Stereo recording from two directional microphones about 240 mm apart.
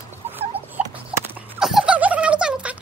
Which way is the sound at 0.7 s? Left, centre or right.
Centre.